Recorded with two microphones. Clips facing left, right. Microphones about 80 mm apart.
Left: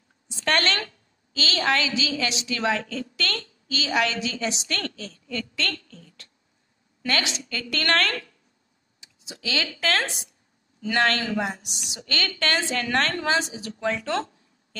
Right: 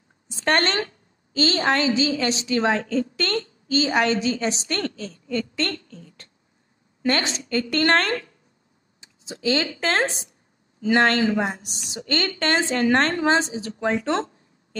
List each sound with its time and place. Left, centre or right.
0.3 s a sound: right
1.3 s a woman's voice: right
1.6 s a woman's voice: right